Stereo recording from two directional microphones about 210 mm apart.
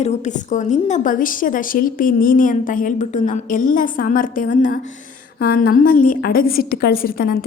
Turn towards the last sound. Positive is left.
turn(degrees=45)  # may be behind; listen again after turning